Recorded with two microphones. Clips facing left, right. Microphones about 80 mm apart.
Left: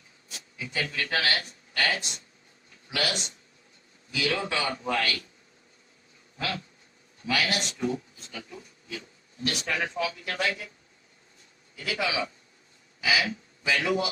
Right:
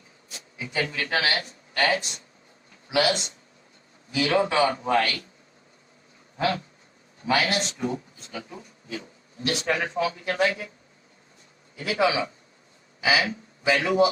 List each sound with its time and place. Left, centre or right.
0.3 s speech: right
6.3 s a sound: right
7.3 s speech: right
11.9 s a man's voice: right